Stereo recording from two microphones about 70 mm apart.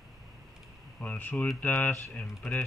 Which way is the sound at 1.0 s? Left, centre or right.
Left.